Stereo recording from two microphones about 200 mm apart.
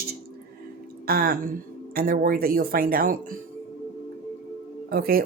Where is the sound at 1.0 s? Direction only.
50° right (ahead or behind).